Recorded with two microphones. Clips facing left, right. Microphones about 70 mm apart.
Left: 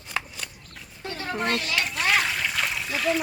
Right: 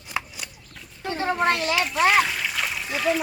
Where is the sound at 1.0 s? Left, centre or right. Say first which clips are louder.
Right 7 dB; right.